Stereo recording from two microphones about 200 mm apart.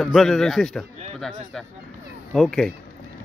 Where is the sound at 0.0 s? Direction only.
Centre (ahead or behind).